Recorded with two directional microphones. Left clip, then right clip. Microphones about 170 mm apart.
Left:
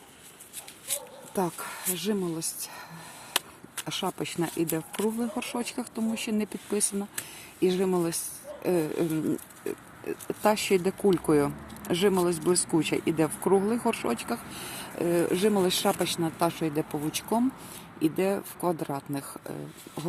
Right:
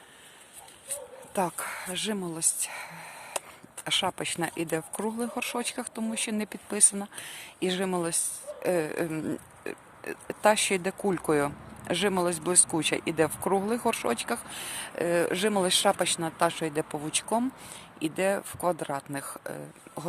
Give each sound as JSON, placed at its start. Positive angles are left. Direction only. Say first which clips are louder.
{"t": 1.4, "sound": "speech", "louder": "right 1 dB", "side_deg": -15}